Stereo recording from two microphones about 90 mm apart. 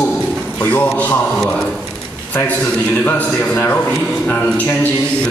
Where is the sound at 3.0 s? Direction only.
20° left (ahead or behind).